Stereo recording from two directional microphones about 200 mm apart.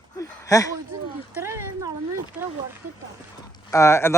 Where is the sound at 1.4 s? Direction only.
15° right (ahead or behind).